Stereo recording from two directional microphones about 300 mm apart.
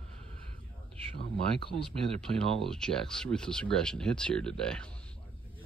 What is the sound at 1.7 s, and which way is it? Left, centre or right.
Speech, centre.